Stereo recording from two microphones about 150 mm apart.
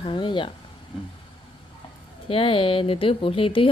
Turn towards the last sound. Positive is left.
turn(degrees=35)  # may be behind; listen again after turning